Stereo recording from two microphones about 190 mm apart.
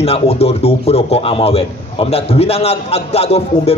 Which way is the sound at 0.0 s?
30° left (ahead or behind).